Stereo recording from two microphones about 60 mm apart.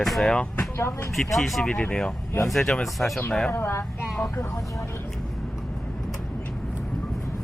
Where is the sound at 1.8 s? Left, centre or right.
Centre.